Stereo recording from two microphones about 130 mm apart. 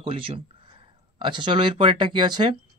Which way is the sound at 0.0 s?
45° right (ahead or behind).